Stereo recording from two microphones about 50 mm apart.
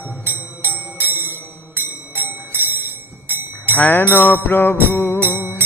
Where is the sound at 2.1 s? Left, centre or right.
Right.